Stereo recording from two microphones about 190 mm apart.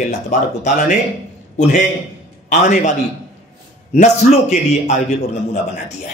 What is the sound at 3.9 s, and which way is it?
A man's voice, 40° left (ahead or behind).